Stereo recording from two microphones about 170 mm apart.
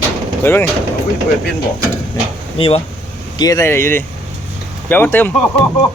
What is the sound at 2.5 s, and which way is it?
Speech, 35° left (ahead or behind).